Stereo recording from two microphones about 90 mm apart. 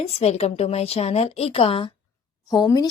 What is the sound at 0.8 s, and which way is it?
Speech, 90° left.